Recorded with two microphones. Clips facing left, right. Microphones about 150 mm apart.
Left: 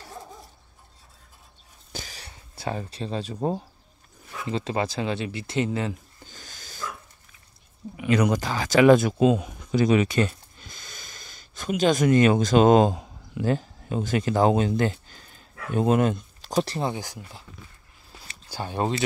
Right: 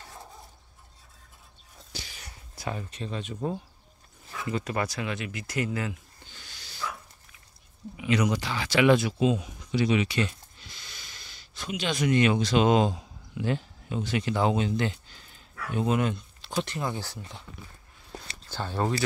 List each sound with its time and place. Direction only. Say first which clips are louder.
1.9 s a sound: left 5 dB; 50° left (ahead or behind)
2.1 s speech: left 2 dB; 30° left (ahead or behind)
6.2 s dog: left 5 dB; 45° left (ahead or behind)
8.0 s speech: left 4 dB; 50° left (ahead or behind); by 16.9 s 35° left (ahead or behind)
16.9 s speech: left 2 dB; 15° left (ahead or behind)
18.5 s speech: left 2 dB; 15° left (ahead or behind)